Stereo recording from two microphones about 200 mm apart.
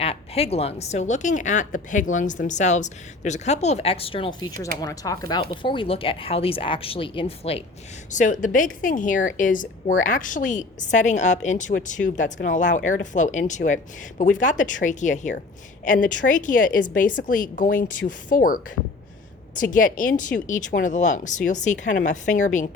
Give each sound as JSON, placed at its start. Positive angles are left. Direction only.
{"t": 0.0, "sound": "a woman's voice", "side_deg": 30}
{"t": 19.7, "sound": "a woman's voice", "side_deg": 40}